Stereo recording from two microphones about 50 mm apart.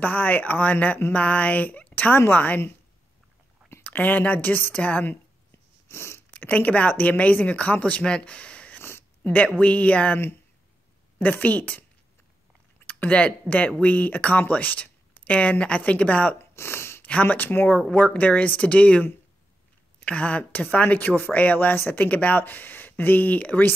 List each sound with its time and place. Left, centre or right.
0.0 s speech: left
2.1 s a woman's voice: left
3.9 s speech: left
5.9 s a sound: left
6.3 s speech: left
11.1 s speech: left
12.8 s speech: left
16.5 s a sound: left
17.0 s speech: left
17.9 s speech: left